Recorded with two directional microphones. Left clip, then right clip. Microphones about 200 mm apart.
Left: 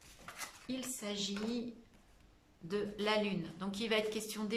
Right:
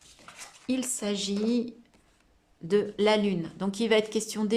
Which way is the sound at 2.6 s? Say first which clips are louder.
Right 12 dB; 40° right (ahead or behind).